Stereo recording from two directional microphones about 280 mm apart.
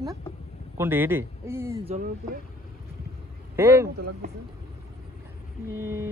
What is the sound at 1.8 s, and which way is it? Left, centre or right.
Speech, right.